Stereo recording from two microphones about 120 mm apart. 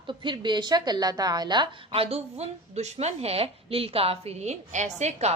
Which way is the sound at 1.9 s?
55° right (ahead or behind).